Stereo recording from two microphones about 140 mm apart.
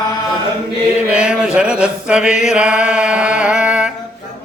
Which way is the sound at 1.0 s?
10° right (ahead or behind).